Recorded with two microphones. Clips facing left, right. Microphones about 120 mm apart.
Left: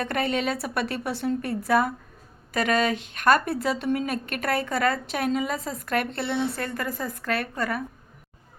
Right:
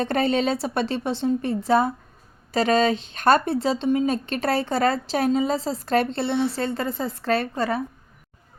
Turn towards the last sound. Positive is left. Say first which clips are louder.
# right 5 dB
turn(degrees=-30)  # may be behind; listen again after turning